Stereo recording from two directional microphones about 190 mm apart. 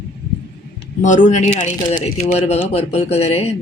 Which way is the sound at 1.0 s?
40° left (ahead or behind).